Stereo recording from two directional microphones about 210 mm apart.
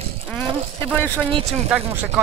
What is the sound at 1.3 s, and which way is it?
Speech, 25° right (ahead or behind).